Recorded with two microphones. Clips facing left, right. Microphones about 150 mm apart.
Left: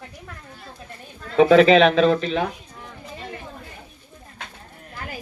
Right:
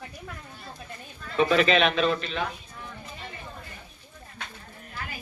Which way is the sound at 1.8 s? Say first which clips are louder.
Left 8 dB; 40° left (ahead or behind).